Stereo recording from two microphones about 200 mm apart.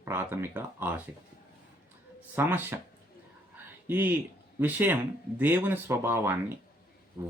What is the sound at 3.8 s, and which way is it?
Speech, 10° right (ahead or behind).